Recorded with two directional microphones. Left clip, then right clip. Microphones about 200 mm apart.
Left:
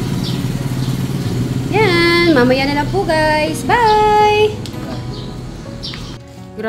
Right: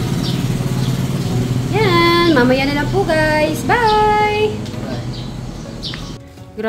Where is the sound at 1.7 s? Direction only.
25° left (ahead or behind).